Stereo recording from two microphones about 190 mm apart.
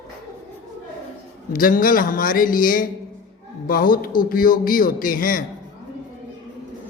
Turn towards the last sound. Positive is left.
turn(degrees=45)  # may be behind; listen again after turning